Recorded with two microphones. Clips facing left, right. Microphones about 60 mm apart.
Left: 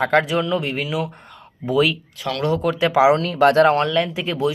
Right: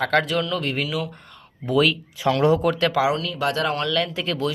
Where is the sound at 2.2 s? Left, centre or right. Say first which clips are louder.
Right 4 dB; centre.